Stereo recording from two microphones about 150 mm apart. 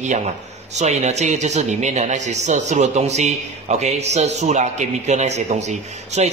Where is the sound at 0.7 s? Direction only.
50° right (ahead or behind).